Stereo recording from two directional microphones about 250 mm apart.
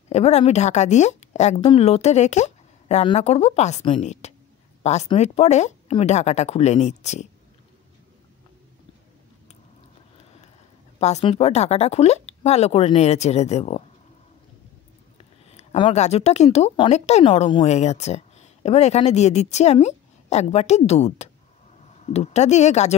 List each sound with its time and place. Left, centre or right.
0.1 s speech: left
11.0 s speech: left
15.5 s speech: left